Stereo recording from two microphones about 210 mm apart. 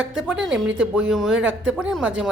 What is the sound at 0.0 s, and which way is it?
Speech, 5° right (ahead or behind).